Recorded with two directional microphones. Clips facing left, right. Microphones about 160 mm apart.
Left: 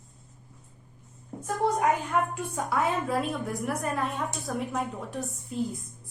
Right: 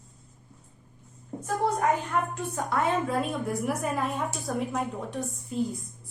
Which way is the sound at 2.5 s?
5° left (ahead or behind).